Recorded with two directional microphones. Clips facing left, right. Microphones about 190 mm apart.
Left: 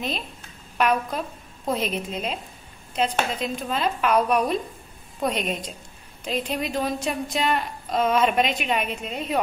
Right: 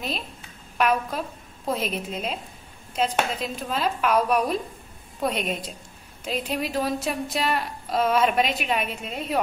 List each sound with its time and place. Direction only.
0.7 s a woman's voice: 5° right (ahead or behind)